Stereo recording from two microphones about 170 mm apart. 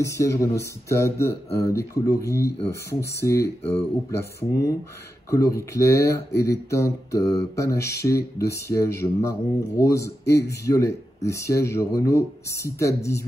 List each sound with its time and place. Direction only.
0.0 s speech: 15° left (ahead or behind)